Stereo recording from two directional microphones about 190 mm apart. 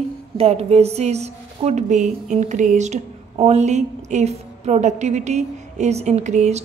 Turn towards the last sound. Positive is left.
turn(degrees=-35)  # may be behind; listen again after turning